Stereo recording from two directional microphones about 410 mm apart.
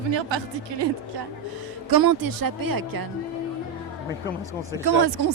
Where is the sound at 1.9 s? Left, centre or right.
Right.